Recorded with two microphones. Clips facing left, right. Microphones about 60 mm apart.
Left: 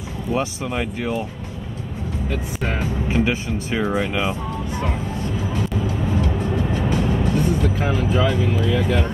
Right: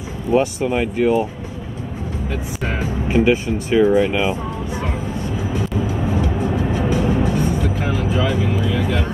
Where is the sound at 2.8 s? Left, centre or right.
Right.